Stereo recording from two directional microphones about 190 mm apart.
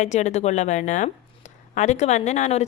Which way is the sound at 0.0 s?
40° left (ahead or behind).